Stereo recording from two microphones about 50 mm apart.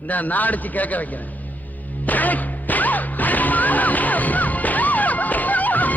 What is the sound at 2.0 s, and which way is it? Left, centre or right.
Music, left.